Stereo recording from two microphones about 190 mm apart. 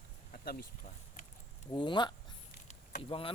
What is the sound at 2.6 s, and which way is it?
Vehicle, 35° left (ahead or behind).